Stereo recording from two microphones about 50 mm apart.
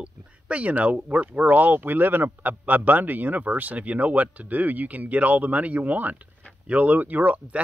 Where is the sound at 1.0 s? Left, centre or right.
Right.